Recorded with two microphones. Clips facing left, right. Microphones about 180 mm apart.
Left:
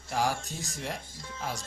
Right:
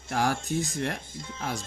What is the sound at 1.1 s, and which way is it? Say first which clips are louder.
Speech: right 4 dB; 20° right (ahead or behind).